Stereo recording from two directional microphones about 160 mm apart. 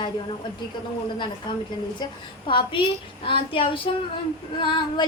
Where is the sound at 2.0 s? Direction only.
30° left (ahead or behind).